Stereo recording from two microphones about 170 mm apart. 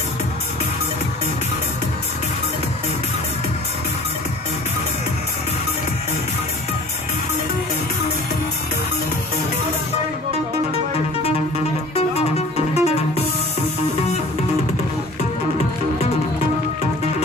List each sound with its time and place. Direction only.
11.9 s music: 35° left (ahead or behind)